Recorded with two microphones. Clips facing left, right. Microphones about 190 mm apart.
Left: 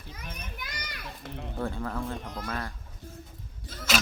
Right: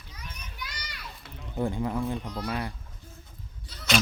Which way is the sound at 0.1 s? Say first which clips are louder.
Left 4 dB; 50° left (ahead or behind).